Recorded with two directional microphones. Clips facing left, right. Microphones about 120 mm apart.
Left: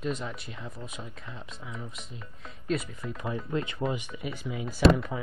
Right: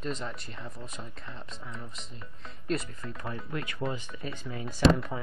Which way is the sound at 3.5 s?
25° left (ahead or behind).